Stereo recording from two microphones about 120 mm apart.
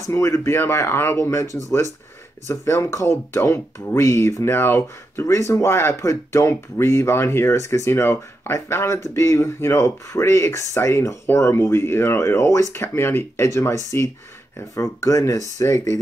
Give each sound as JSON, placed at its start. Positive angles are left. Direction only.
{"t": 0.0, "sound": "speech", "side_deg": 25}